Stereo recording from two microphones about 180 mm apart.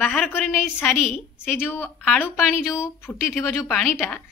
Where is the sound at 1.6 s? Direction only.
10° left (ahead or behind).